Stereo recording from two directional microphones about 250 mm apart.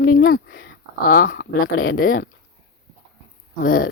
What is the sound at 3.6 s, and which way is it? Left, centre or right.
Speech, left.